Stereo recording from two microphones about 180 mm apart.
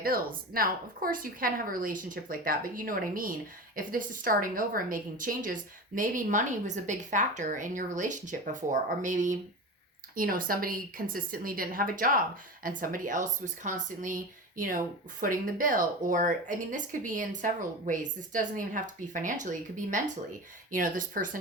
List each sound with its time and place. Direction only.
0.0 s speech: 55° right (ahead or behind)